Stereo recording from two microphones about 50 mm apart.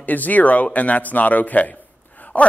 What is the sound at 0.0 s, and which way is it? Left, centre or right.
Speech, left.